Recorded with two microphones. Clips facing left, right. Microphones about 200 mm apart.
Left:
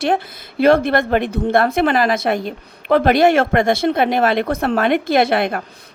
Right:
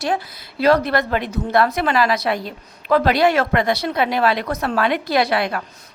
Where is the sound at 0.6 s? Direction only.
50° left (ahead or behind).